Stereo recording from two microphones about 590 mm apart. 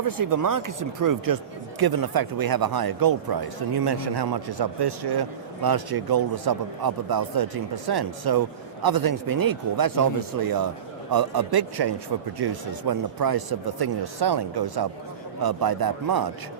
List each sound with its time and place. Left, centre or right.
0.0 s a man's voice: right